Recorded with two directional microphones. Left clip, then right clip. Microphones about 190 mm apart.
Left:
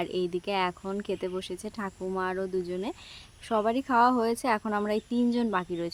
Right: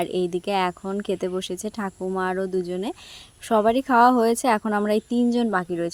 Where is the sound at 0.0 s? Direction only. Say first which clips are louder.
Right 6 dB; 30° right (ahead or behind).